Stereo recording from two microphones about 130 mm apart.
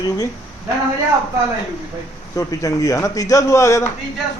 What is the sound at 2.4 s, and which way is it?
A man's voice, 25° left (ahead or behind).